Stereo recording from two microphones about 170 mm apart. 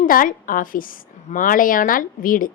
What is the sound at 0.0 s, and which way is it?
A woman's voice, 55° left (ahead or behind).